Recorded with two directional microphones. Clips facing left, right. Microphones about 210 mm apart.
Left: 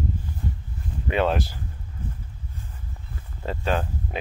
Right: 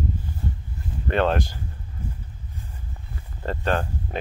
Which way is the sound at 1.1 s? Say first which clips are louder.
Right 1 dB; 5° left (ahead or behind).